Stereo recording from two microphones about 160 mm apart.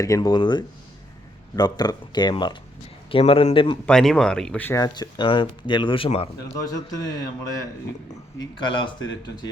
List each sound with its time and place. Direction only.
0.0 s speech: 25° left (ahead or behind)
3.8 s speech: 5° left (ahead or behind)
4.8 s speech: 25° left (ahead or behind)
6.6 s speech: 25° left (ahead or behind)